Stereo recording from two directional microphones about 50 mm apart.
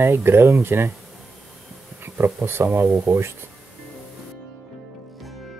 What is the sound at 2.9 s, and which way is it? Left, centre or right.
Speech, right.